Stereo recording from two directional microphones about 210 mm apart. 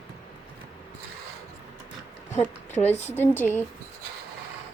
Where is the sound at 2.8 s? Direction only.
30° left (ahead or behind).